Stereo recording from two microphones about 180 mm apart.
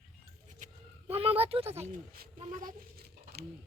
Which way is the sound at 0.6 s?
35° right (ahead or behind).